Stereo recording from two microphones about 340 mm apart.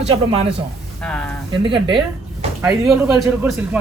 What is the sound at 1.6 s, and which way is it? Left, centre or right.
Speech, centre.